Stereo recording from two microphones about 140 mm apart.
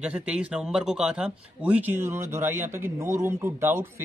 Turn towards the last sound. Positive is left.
turn(degrees=-15)  # may be behind; listen again after turning